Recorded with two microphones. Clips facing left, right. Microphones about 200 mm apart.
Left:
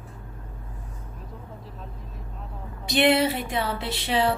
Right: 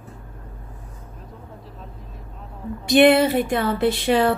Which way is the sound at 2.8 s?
50° right (ahead or behind).